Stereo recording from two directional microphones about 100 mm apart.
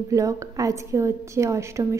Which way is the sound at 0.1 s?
35° right (ahead or behind).